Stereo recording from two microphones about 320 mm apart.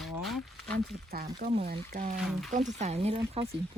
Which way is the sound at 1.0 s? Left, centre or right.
Right.